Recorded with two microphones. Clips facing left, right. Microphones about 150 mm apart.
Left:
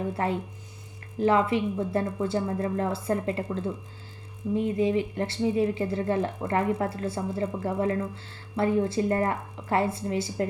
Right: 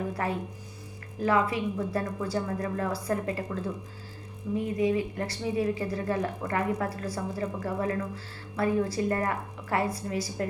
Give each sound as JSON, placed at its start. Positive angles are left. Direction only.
{"t": 0.1, "sound": "speech", "side_deg": 25}